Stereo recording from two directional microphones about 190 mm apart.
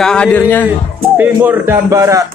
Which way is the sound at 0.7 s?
10° right (ahead or behind).